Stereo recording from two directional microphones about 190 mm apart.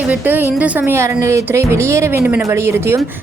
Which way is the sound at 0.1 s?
10° right (ahead or behind).